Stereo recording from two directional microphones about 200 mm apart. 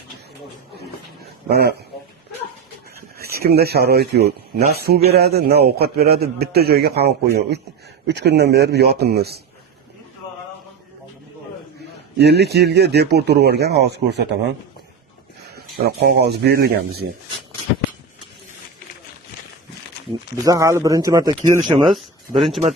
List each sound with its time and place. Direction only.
0.8 s a sound: 50° right (ahead or behind)
3.2 s a man's voice: 50° right (ahead or behind)
12.1 s a man's voice: 55° right (ahead or behind)
15.8 s speech: 55° right (ahead or behind)
20.1 s speech: 15° right (ahead or behind)
21.8 s speech: centre (ahead or behind)